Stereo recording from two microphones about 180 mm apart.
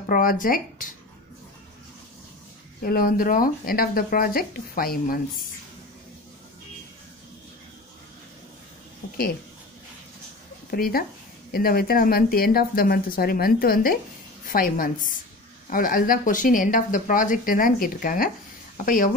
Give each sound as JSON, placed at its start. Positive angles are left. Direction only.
{"t": 0.0, "sound": "speech", "side_deg": 50}
{"t": 2.8, "sound": "speech", "side_deg": 55}
{"t": 10.7, "sound": "a woman's voice", "side_deg": 55}